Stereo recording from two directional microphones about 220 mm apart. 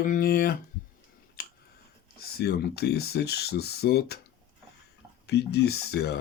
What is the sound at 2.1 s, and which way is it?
Speech, 45° left (ahead or behind).